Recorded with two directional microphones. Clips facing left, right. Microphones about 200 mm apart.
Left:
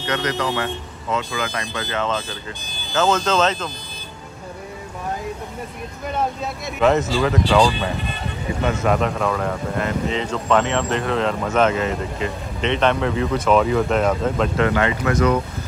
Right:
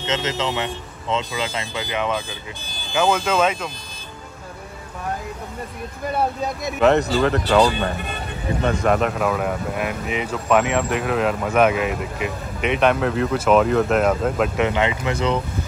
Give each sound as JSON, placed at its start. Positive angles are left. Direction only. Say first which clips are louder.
{"t": 0.0, "sound": "speech", "louder": "left 1 dB", "side_deg": -25}
{"t": 6.8, "sound": "speech", "louder": "right 1 dB", "side_deg": 0}
{"t": 8.8, "sound": "speech", "louder": "even", "side_deg": 0}
{"t": 14.6, "sound": "speech", "louder": "left 1 dB", "side_deg": -15}